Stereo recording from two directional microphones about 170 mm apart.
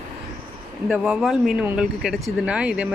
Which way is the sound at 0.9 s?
Centre (ahead or behind).